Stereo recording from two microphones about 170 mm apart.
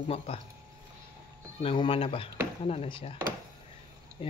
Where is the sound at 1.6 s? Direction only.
35° left (ahead or behind).